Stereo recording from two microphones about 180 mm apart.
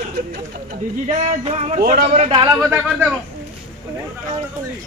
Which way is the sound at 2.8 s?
5° right (ahead or behind).